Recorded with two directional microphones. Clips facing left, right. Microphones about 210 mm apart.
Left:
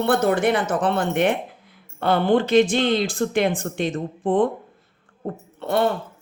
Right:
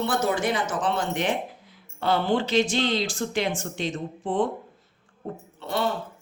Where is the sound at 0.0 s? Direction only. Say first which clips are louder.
Left 6 dB; 60° left (ahead or behind).